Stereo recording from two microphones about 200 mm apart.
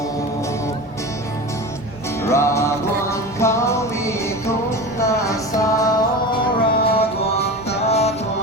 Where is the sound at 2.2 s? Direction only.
15° left (ahead or behind).